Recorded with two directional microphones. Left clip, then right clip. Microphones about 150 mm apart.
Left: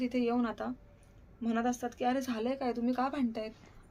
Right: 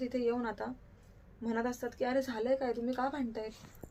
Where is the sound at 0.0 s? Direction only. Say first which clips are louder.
Left 1 dB; 15° left (ahead or behind).